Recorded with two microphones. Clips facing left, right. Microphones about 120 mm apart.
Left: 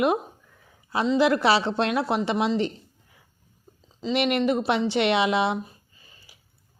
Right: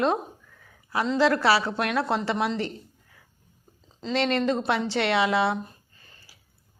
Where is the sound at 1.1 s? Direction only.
20° left (ahead or behind).